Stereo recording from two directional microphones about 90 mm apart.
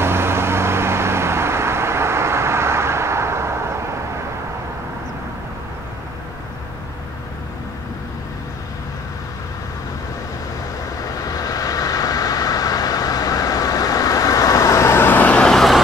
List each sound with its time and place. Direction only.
0.0 s vehicle: 25° right (ahead or behind)
11.0 s vehicle: 40° left (ahead or behind); by 15.5 s 15° left (ahead or behind)
15.5 s vehicle: centre (ahead or behind)